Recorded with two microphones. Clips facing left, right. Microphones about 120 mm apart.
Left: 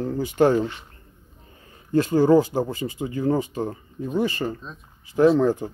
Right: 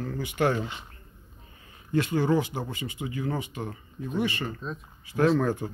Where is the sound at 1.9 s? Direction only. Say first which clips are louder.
Left 8 dB; 35° left (ahead or behind).